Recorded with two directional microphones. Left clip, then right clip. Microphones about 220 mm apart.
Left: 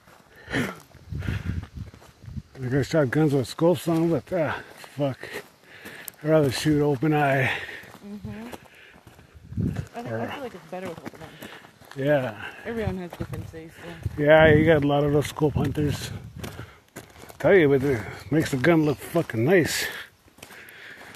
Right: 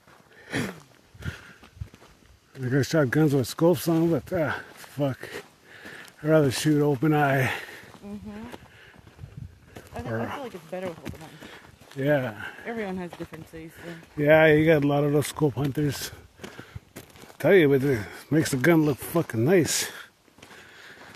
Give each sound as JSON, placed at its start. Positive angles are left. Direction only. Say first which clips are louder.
{"t": 2.6, "sound": "speech", "louder": "left 1 dB", "side_deg": -25}
{"t": 10.0, "sound": "speech", "louder": "even", "side_deg": -25}
{"t": 11.3, "sound": "walk", "louder": "left 3 dB", "side_deg": -20}
{"t": 12.0, "sound": "speech", "louder": "left 2 dB", "side_deg": -20}
{"t": 13.8, "sound": "speech", "louder": "left 2 dB", "side_deg": -25}
{"t": 17.4, "sound": "speech", "louder": "left 1 dB", "side_deg": -20}
{"t": 20.7, "sound": "a sound", "louder": "left 4 dB", "side_deg": -20}